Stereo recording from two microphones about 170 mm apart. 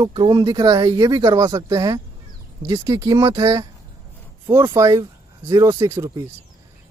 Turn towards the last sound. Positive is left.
turn(degrees=-20)  # may be behind; listen again after turning